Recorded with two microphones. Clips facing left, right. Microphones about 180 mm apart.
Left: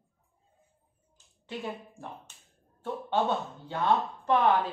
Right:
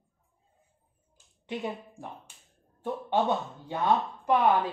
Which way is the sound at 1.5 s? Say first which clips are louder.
Right 3 dB; 15° right (ahead or behind).